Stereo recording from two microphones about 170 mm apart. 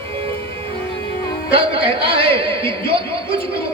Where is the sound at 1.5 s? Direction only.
30° right (ahead or behind).